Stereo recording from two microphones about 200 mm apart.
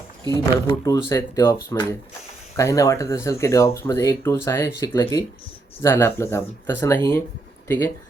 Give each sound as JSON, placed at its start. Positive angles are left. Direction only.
{"t": 0.5, "sound": "speech", "side_deg": 20}